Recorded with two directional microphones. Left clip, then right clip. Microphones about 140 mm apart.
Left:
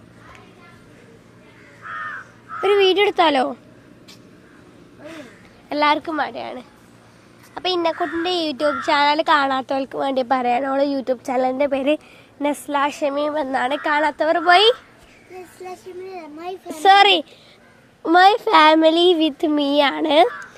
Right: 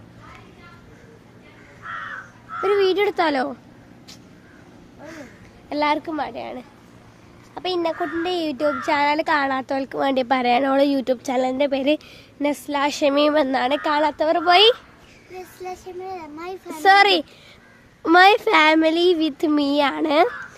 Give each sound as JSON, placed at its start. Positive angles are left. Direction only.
{"t": 2.6, "sound": "speech", "side_deg": 5}
{"t": 5.6, "sound": "speech", "side_deg": 10}
{"t": 6.4, "sound": "speech", "side_deg": 0}
{"t": 9.9, "sound": "a child's voice", "side_deg": -20}
{"t": 10.6, "sound": "a woman's voice", "side_deg": -35}
{"t": 13.1, "sound": "a woman's voice", "side_deg": -50}
{"t": 13.5, "sound": "a woman's voice", "side_deg": -20}
{"t": 16.0, "sound": "a child's voice", "side_deg": -10}
{"t": 16.8, "sound": "speech", "side_deg": 10}
{"t": 18.0, "sound": "a woman's voice", "side_deg": -25}
{"t": 18.5, "sound": "speech", "side_deg": -5}